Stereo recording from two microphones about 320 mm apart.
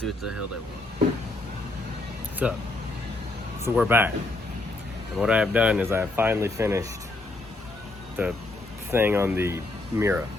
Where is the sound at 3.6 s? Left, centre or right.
Centre.